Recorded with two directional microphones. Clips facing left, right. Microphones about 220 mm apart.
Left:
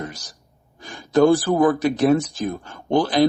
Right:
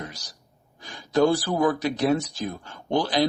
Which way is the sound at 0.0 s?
50° left (ahead or behind).